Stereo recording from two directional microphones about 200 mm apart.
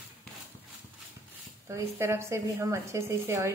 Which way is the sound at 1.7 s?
15° right (ahead or behind).